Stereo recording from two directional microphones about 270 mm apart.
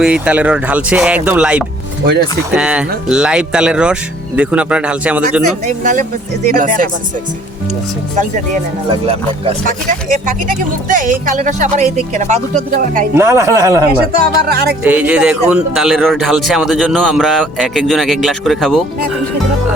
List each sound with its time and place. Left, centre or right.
0.0 s a man's voice: centre
5.6 s speech: right
9.0 s speech: right
13.1 s speech: centre
14.4 s music: right
14.8 s a man's voice: centre